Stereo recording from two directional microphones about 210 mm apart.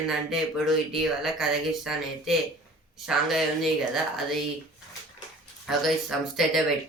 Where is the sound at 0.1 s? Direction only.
Centre (ahead or behind).